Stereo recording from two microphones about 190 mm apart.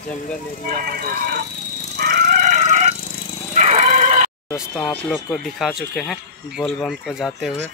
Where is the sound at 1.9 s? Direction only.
55° right (ahead or behind); by 3.0 s 35° right (ahead or behind).